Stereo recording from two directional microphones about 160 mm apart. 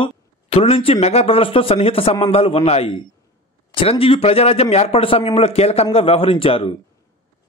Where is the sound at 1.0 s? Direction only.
40° left (ahead or behind).